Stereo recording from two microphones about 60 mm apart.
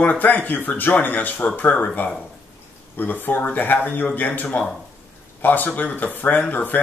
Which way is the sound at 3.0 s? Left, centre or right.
Left.